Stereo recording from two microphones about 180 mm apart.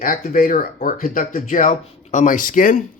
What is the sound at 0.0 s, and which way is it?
Speech, 50° left (ahead or behind).